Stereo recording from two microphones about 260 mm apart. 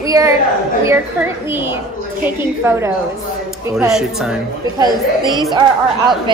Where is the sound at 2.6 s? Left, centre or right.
Centre.